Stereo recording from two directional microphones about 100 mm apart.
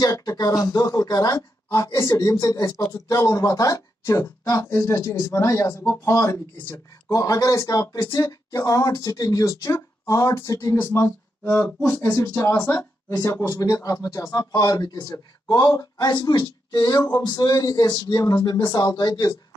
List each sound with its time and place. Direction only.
0.0 s speech: 35° left (ahead or behind)